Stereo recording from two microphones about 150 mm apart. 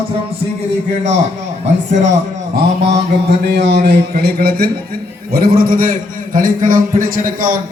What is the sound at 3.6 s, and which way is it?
Speech, 90° right.